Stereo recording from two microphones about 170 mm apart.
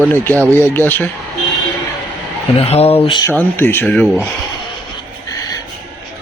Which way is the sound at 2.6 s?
35° left (ahead or behind).